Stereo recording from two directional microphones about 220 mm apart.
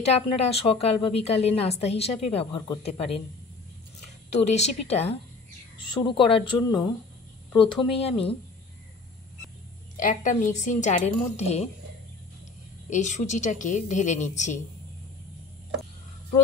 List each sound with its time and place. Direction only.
0.0 s a woman's voice: 25° left (ahead or behind)
4.4 s a woman's voice: 30° left (ahead or behind)
9.9 s a woman's voice: 35° left (ahead or behind)
12.9 s a woman's voice: 30° left (ahead or behind)